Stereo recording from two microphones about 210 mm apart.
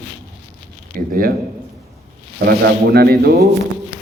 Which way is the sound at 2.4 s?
50° right (ahead or behind).